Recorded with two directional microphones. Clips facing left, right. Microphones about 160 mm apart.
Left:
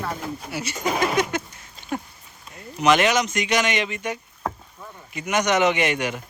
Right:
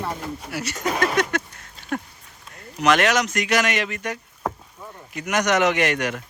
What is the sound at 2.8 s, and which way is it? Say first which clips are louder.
Speech: even; centre (ahead or behind).